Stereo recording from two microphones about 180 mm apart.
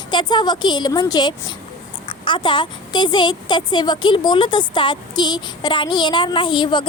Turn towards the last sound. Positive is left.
turn(degrees=25)  # may be behind; listen again after turning